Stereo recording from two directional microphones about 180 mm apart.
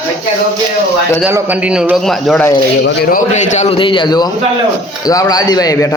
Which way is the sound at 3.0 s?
45° left (ahead or behind).